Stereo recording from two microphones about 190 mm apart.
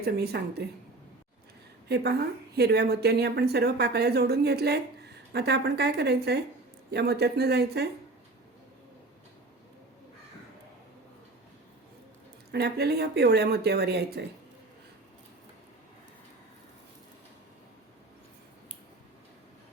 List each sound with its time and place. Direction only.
0.0 s a woman's voice: 55° right (ahead or behind)
1.9 s a woman's voice: 60° right (ahead or behind)
12.5 s a woman's voice: 60° right (ahead or behind)